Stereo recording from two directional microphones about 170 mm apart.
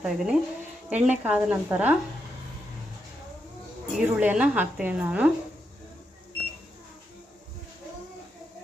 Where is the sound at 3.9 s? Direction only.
5° right (ahead or behind).